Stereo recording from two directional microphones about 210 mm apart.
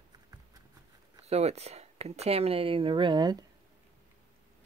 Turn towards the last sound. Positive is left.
turn(degrees=-20)  # may be behind; listen again after turning